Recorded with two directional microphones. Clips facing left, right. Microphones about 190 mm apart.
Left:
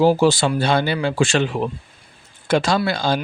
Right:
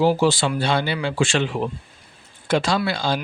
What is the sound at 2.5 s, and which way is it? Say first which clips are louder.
Speech: left 2 dB; 45° left (ahead or behind).